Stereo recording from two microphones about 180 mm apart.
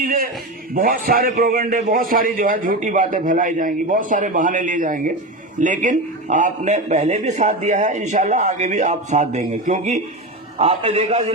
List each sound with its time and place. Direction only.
0.0 s a man's voice: 50° right (ahead or behind)